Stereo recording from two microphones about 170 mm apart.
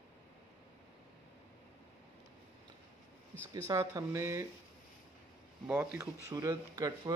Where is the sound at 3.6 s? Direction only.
20° right (ahead or behind).